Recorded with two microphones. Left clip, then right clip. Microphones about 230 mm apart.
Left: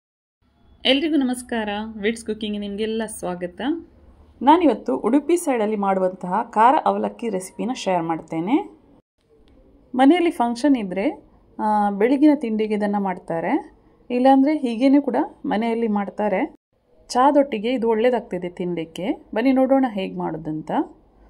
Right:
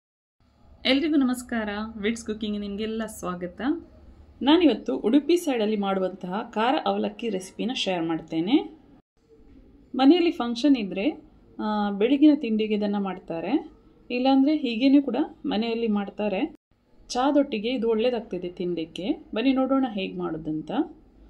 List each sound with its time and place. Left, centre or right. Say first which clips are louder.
0.8 s a woman's voice: left 4 dB; centre
4.6 s speech: left 3 dB; left
10.1 s speech: left 4 dB; left
12.4 s a woman's voice: left 3 dB; left
12.7 s speech: left 5 dB; left
14.6 s a woman's voice: left 4 dB; left
14.9 s speech: left 3 dB; left
15.6 s a woman's voice: left 4 dB; left
15.9 s speech: left 6 dB; left